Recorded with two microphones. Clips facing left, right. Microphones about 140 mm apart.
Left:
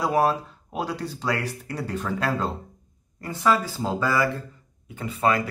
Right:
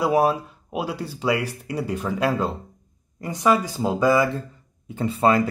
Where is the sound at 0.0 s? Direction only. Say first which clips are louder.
Right 2 dB; 10° right (ahead or behind).